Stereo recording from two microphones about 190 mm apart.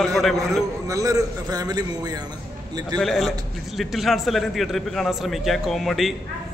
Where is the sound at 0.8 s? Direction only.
15° right (ahead or behind).